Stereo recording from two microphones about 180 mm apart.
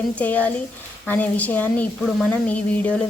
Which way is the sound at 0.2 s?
10° left (ahead or behind).